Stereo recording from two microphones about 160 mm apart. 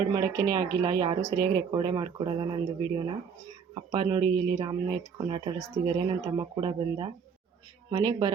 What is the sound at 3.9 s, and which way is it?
Speech, 25° right (ahead or behind).